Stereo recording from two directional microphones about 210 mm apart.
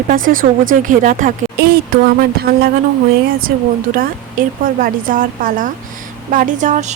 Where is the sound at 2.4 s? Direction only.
45° right (ahead or behind).